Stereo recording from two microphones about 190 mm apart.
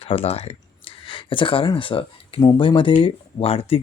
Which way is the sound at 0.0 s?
30° left (ahead or behind).